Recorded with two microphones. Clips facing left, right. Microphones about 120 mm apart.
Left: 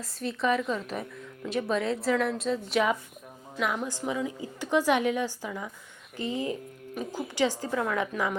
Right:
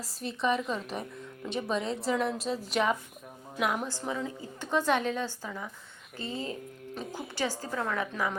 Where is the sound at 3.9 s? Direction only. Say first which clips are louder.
Left 3 dB; 15° left (ahead or behind).